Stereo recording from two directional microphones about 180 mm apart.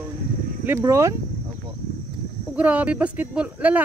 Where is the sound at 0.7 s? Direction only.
15° right (ahead or behind).